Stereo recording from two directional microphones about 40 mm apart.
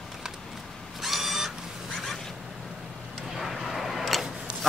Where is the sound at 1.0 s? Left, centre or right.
Centre.